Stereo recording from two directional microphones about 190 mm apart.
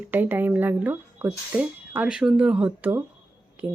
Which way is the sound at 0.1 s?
10° right (ahead or behind).